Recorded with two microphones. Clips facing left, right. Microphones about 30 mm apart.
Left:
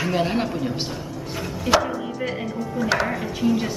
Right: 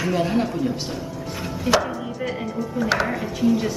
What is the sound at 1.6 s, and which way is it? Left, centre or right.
Chopping, centre.